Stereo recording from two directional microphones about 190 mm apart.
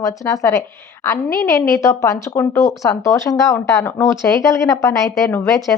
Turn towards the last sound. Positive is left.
turn(degrees=15)  # may be behind; listen again after turning